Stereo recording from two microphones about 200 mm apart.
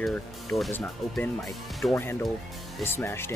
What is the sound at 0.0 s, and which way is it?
Speech, centre (ahead or behind).